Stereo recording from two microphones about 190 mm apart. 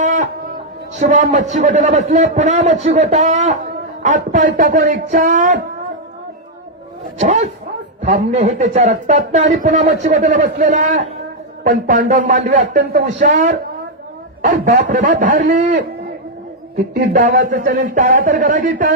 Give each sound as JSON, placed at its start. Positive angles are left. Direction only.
{"t": 0.0, "sound": "livestock", "side_deg": -40}
{"t": 0.9, "sound": "a man's voice", "side_deg": -40}
{"t": 7.2, "sound": "a man's voice", "side_deg": -35}
{"t": 17.1, "sound": "a man's voice", "side_deg": -45}